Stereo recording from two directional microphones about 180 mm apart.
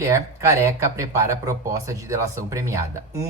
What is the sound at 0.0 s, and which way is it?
Speech, 15° right (ahead or behind).